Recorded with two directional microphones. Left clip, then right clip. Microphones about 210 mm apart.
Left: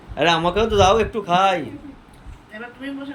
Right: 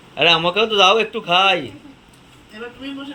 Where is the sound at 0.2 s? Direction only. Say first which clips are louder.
Right 3 dB; 5° left (ahead or behind).